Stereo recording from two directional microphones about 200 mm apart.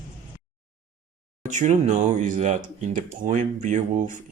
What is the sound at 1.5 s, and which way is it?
Speech, 35° right (ahead or behind).